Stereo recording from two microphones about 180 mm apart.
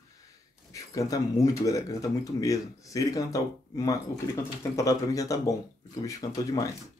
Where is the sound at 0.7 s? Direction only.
20° left (ahead or behind).